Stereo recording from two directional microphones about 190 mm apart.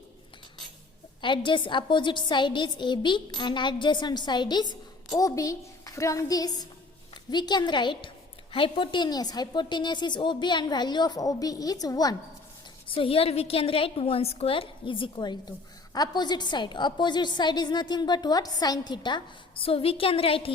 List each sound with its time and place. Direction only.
1.2 s a woman's voice: 25° left (ahead or behind)